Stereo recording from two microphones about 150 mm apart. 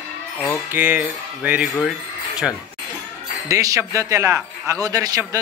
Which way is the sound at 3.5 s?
20° right (ahead or behind).